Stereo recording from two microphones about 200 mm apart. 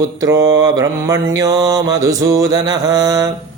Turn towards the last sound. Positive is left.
turn(degrees=-20)  # may be behind; listen again after turning